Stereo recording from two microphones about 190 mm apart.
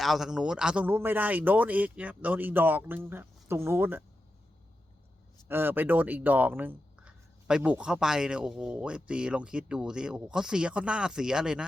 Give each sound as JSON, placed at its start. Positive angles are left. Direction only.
{"t": 0.0, "sound": "speech", "side_deg": 0}
{"t": 5.5, "sound": "speech", "side_deg": -10}